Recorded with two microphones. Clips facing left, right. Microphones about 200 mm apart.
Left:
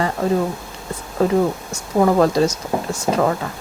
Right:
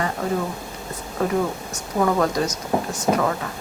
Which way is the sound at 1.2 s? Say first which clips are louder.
Left 5 dB; 30° left (ahead or behind).